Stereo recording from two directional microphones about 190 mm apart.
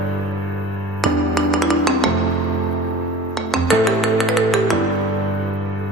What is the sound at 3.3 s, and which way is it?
Music, centre (ahead or behind).